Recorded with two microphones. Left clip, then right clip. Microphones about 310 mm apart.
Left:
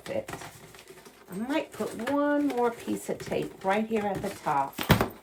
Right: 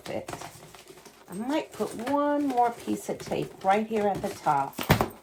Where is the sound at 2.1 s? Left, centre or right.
Right.